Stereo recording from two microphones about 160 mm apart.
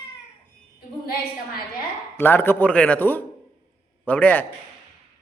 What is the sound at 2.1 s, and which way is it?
A man's voice, 10° left (ahead or behind).